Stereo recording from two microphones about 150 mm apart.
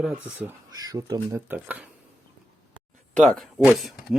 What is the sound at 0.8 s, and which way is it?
Speech, 25° right (ahead or behind).